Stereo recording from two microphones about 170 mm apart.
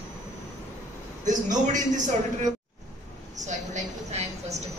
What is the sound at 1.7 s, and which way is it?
Speech, 45° right (ahead or behind).